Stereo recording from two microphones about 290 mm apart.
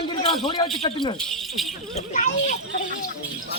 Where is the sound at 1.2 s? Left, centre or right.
Centre.